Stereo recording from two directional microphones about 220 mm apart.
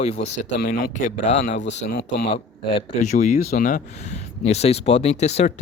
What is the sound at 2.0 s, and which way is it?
Speech, 30° left (ahead or behind).